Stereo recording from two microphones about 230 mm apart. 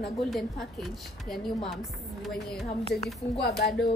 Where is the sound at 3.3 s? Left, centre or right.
Left.